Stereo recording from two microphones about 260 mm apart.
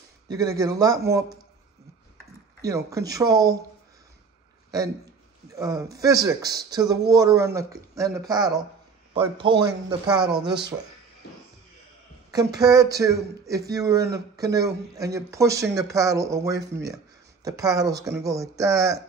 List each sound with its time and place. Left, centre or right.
0.3 s speech: centre
2.6 s speech: centre
4.6 s a man's voice: centre
12.3 s speech: centre